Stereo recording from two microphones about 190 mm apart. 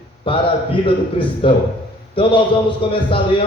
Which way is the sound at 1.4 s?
30° left (ahead or behind).